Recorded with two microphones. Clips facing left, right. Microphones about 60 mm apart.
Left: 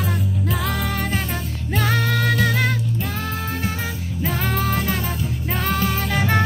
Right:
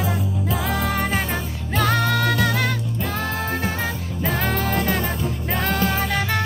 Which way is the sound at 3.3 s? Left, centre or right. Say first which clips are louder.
Right 2 dB; right.